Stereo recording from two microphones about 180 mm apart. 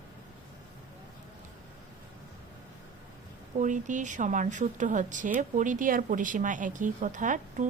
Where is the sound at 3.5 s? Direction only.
45° right (ahead or behind).